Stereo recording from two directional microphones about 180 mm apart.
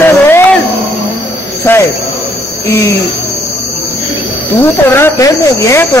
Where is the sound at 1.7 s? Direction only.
10° left (ahead or behind).